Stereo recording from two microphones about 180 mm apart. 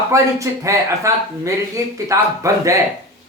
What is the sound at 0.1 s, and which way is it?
Speech, 15° right (ahead or behind).